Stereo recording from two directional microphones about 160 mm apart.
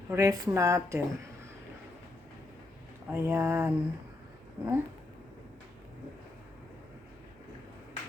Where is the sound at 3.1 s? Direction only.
15° right (ahead or behind).